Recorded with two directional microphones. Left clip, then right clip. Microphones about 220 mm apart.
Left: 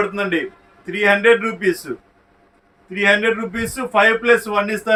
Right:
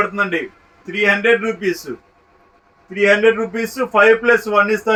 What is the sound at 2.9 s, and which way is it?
A man's voice, 30° left (ahead or behind).